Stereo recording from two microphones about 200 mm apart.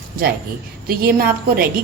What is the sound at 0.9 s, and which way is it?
Speech, 50° right (ahead or behind).